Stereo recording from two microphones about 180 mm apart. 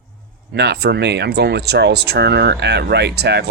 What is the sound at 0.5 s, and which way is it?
Speech, 65° right (ahead or behind).